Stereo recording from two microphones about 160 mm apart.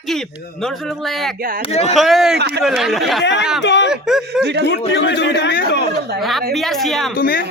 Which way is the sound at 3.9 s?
5° right (ahead or behind).